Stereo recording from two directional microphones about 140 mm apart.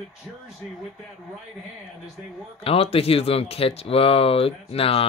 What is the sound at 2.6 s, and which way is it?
Speech, 45° left (ahead or behind).